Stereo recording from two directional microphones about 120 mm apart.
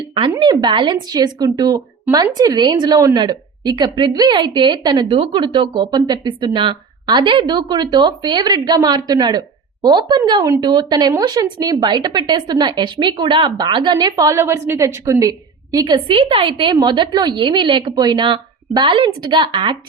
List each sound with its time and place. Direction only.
0.3 s a woman's voice: 40° right (ahead or behind)
14.3 s a woman's voice: 20° right (ahead or behind)
16.0 s a woman's voice: 45° right (ahead or behind)